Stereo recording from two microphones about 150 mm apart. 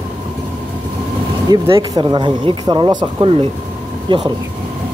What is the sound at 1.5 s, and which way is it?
Speech, 30° right (ahead or behind).